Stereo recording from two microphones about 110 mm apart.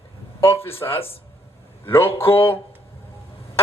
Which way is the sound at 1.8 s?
20° left (ahead or behind).